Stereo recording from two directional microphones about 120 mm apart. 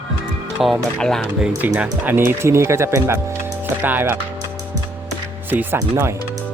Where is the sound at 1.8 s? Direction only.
15° right (ahead or behind).